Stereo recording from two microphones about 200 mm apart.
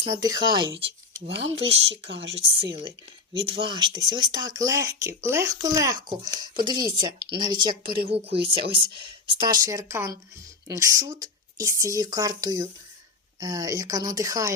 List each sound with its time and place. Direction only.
0.0 s speech: 20° right (ahead or behind)
1.3 s speech: 65° right (ahead or behind)
1.5 s speech: 30° right (ahead or behind)
2.0 s speech: 60° right (ahead or behind)
2.3 s speech: 30° right (ahead or behind)